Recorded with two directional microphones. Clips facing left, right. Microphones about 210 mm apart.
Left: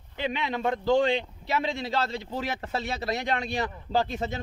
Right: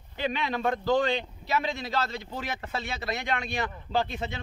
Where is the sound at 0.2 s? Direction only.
20° left (ahead or behind).